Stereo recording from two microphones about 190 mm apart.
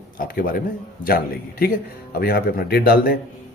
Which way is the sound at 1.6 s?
55° left (ahead or behind).